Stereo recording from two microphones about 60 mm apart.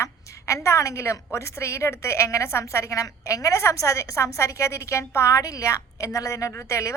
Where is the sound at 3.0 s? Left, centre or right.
Left.